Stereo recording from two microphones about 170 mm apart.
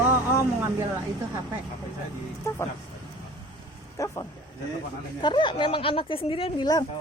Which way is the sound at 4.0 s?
20° left (ahead or behind).